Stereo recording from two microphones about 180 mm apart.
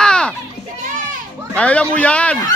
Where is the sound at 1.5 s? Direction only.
5° left (ahead or behind).